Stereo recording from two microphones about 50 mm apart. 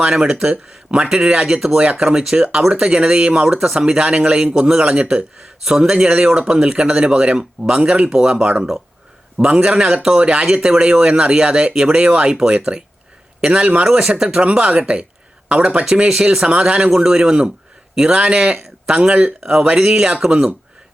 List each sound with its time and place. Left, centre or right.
0.0 s a man's voice: centre
10.6 s a man's voice: centre
13.8 s a man's voice: centre
15.8 s a man's voice: centre
19.4 s a man's voice: centre